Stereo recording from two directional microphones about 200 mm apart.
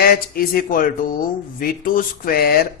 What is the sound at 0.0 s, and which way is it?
A man's voice, 45° left (ahead or behind).